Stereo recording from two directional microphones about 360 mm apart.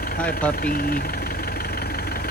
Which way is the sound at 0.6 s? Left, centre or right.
Left.